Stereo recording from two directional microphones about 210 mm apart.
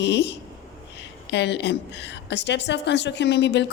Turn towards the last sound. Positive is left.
turn(degrees=55)  # may be behind; listen again after turning